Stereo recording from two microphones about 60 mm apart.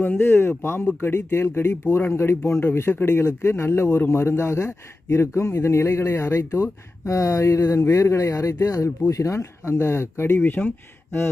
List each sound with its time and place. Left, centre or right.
0.2 s speech: left